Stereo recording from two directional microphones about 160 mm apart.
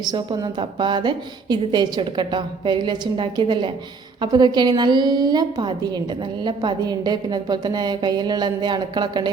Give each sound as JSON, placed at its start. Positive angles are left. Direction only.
{"t": 0.0, "sound": "a woman's voice", "side_deg": -25}